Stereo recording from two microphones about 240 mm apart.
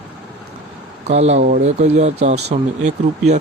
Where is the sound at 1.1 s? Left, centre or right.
Right.